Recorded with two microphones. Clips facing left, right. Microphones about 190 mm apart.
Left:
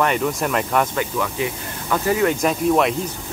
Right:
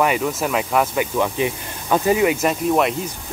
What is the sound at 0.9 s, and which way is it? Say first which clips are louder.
Speech: right 3 dB; 20° right (ahead or behind).